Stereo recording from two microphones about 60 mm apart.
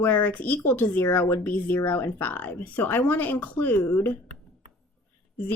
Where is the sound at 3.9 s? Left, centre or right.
Left.